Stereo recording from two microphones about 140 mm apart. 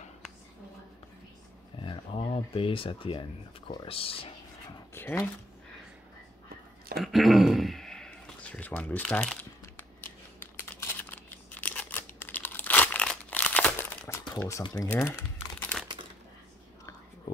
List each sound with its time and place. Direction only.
1.8 s speech: 40° left (ahead or behind)
4.9 s speech: 15° left (ahead or behind)
7.0 s a sound: centre (ahead or behind)
9.0 s crumpling: 5° left (ahead or behind)
14.6 s speech: 30° left (ahead or behind)
15.0 s speech: 15° left (ahead or behind)